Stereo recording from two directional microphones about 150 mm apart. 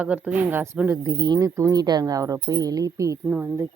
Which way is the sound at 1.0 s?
25° right (ahead or behind).